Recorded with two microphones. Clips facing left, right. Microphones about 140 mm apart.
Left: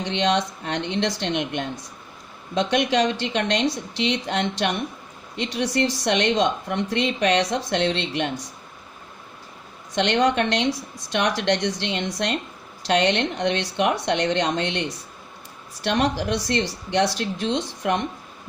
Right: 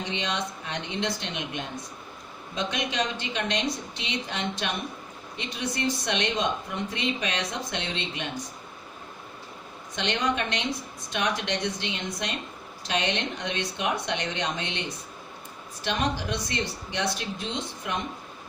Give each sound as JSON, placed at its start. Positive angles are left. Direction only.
{"t": 0.0, "sound": "a woman's voice", "side_deg": 75}
{"t": 2.9, "sound": "a woman's voice", "side_deg": 75}
{"t": 9.9, "sound": "a woman's voice", "side_deg": 75}